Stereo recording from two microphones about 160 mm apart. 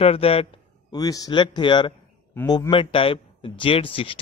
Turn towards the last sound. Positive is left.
turn(degrees=35)  # may be behind; listen again after turning